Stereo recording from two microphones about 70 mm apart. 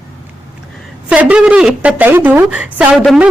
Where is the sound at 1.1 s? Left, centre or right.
Centre.